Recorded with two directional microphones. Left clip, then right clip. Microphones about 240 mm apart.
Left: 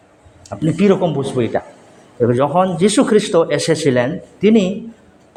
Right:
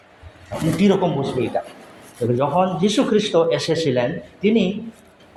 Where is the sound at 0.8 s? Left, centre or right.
Left.